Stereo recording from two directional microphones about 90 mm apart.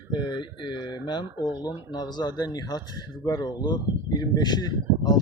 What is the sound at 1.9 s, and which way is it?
Speech, 50° left (ahead or behind).